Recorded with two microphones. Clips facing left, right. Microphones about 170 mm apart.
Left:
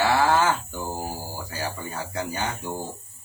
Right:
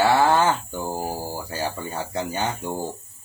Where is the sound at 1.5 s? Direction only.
25° right (ahead or behind).